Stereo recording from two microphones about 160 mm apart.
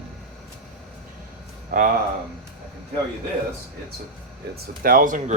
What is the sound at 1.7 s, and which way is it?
Speech, 65° right (ahead or behind).